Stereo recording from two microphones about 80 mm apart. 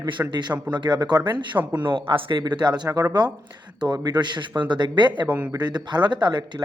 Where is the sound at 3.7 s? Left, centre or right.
Right.